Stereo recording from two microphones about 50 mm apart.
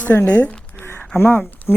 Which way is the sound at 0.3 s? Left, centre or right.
Left.